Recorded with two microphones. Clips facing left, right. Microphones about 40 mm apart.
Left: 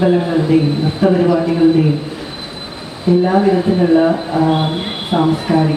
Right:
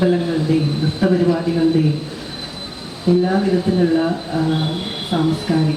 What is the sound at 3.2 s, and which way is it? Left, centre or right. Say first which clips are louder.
Speech: left 5 dB; left.